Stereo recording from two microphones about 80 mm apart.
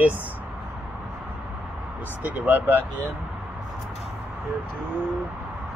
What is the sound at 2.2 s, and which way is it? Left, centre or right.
Speech, right.